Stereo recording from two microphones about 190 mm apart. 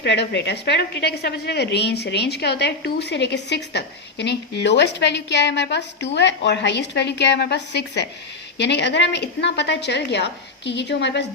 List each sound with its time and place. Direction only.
0.0 s a woman's voice: 65° left (ahead or behind)